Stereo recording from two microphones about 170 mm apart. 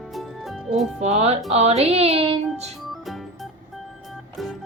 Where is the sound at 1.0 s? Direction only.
40° right (ahead or behind).